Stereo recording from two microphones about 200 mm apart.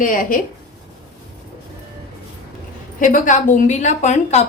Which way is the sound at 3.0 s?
40° left (ahead or behind).